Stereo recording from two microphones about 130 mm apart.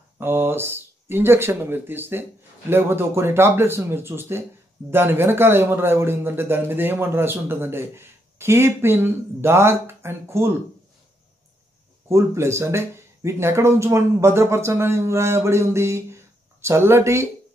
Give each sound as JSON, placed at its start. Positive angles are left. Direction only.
{"t": 0.2, "sound": "a man's voice", "side_deg": -15}
{"t": 12.1, "sound": "speech", "side_deg": -20}